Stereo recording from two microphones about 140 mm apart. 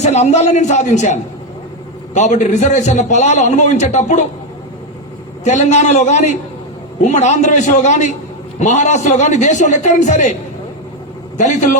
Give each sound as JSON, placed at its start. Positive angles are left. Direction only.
{"t": 0.0, "sound": "a man's voice", "side_deg": 55}
{"t": 5.5, "sound": "a man's voice", "side_deg": 60}
{"t": 11.3, "sound": "a man's voice", "side_deg": 60}